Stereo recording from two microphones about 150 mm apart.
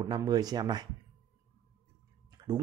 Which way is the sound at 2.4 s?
25° right (ahead or behind).